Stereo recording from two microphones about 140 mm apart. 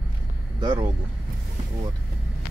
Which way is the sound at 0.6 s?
35° right (ahead or behind).